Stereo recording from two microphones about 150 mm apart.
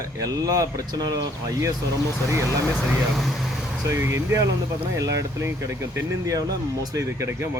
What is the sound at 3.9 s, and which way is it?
Speech, 15° right (ahead or behind).